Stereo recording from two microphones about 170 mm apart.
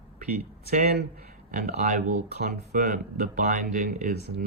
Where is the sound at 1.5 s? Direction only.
55° right (ahead or behind).